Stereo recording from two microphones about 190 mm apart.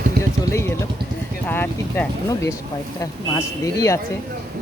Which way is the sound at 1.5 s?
10° left (ahead or behind).